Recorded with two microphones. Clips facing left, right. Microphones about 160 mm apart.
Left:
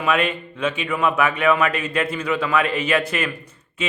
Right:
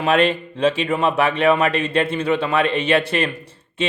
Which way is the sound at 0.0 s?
30° right (ahead or behind).